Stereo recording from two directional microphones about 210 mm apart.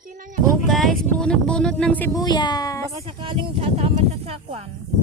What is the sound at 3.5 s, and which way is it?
Speech, 30° right (ahead or behind).